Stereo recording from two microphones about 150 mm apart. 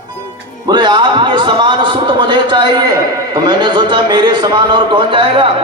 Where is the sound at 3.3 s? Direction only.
30° right (ahead or behind).